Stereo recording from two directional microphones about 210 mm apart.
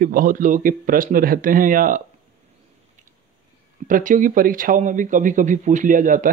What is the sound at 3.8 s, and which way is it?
A man's voice, 40° right (ahead or behind).